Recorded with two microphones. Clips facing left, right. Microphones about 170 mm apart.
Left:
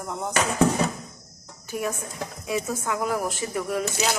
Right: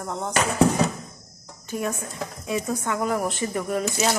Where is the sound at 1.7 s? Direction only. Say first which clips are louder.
Right 1 dB; 5° left (ahead or behind).